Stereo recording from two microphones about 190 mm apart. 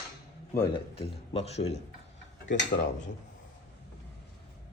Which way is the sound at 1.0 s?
35° left (ahead or behind).